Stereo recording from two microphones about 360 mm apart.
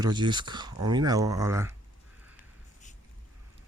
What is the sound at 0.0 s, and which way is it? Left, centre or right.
Speech, centre.